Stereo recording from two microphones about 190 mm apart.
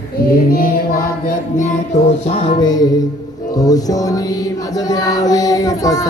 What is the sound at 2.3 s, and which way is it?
Music, 25° left (ahead or behind).